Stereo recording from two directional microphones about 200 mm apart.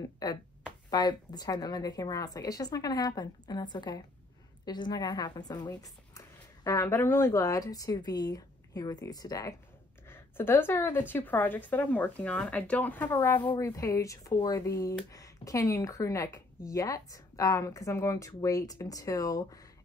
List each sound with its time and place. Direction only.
0.2 s a woman's voice: 20° left (ahead or behind)